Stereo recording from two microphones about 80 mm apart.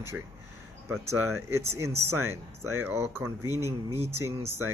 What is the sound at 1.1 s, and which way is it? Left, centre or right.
Speech, right.